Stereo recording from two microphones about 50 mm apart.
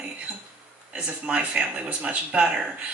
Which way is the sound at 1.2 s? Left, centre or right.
Right.